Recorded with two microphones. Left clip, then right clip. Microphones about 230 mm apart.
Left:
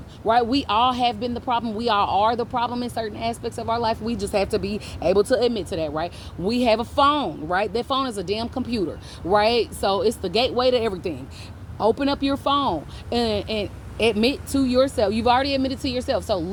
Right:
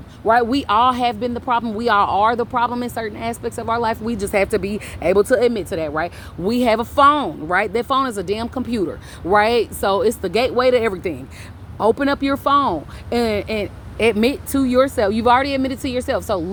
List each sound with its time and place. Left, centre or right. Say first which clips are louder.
0.3 s speech: right 4 dB; right
4.4 s speech: right 5 dB; right
5.1 s speech: right 5 dB; right
5.5 s speech: right 4 dB; right
5.9 s speech: right 4 dB; right
13.6 s speech: right 3 dB; right
14.7 s speech: right 4 dB; right
15.5 s speech: right 2 dB; right
16.0 s speech: right 3 dB; right